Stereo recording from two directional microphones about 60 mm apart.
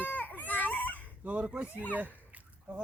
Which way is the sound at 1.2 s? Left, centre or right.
Right.